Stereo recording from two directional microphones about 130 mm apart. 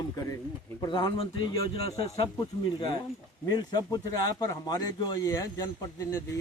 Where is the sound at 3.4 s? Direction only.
35° left (ahead or behind).